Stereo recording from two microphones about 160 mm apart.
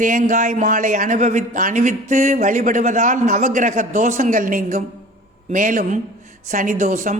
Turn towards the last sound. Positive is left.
turn(degrees=-50)  # may be behind; listen again after turning